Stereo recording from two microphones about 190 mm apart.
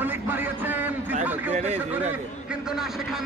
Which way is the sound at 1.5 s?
35° right (ahead or behind).